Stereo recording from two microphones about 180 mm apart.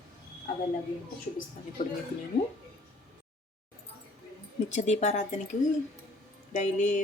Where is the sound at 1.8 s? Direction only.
45° left (ahead or behind).